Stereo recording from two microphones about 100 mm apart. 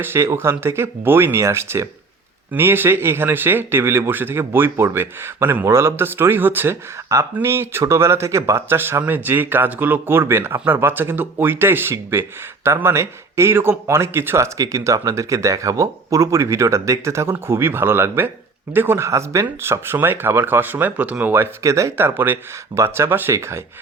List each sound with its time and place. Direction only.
0.0 s speech: 25° right (ahead or behind)
7.1 s speech: 30° right (ahead or behind)